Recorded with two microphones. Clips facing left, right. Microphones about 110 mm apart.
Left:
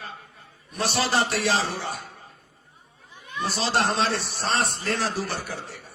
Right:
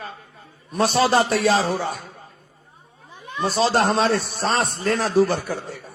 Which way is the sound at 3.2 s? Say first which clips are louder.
Right 7 dB; 40° right (ahead or behind).